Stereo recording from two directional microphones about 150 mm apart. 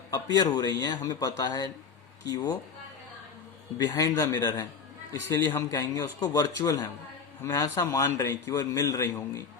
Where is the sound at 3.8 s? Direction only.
25° left (ahead or behind).